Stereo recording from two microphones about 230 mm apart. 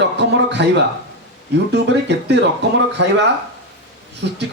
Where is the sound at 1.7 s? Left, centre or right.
Right.